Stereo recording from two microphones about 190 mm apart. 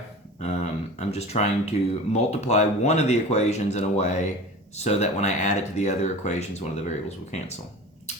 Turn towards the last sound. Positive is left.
turn(degrees=35)  # may be behind; listen again after turning